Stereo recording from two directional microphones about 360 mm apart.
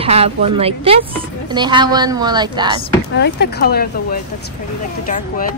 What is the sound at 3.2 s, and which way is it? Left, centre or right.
Speech, left.